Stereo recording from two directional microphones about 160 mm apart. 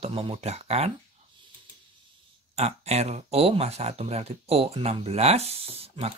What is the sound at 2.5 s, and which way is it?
Speech, 40° right (ahead or behind).